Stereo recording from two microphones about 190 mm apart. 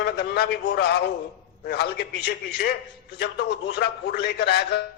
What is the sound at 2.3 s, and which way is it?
A man's voice, 55° left (ahead or behind).